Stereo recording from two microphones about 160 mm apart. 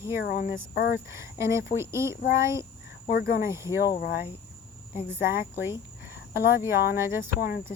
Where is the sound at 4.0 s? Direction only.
70° left (ahead or behind).